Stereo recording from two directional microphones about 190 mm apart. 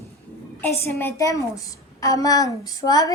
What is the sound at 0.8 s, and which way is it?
A woman's voice, 15° left (ahead or behind).